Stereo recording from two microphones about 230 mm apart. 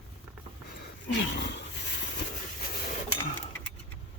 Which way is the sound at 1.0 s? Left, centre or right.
Left.